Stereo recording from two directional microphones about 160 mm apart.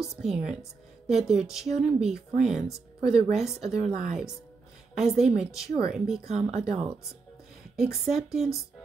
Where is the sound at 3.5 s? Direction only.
45° right (ahead or behind).